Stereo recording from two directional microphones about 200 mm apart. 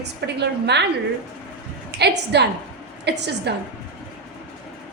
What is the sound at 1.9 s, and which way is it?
A woman's voice, 55° right (ahead or behind).